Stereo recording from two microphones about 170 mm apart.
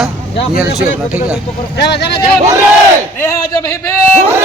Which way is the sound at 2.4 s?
15° right (ahead or behind).